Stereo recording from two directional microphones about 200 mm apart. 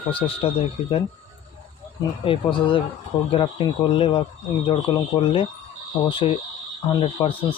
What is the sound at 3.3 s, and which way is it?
Speech, 30° left (ahead or behind).